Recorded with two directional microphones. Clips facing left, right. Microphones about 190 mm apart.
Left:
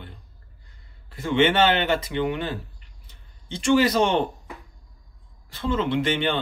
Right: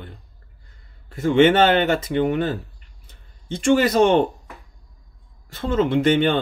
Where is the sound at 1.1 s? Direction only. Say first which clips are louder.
Right 6 dB; 45° right (ahead or behind).